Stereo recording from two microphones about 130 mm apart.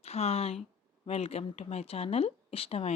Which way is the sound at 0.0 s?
55° left (ahead or behind).